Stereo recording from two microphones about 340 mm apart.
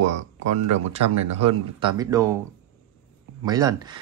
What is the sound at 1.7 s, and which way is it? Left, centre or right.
Speech, centre.